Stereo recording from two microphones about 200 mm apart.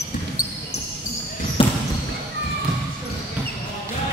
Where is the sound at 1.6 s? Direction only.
25° left (ahead or behind).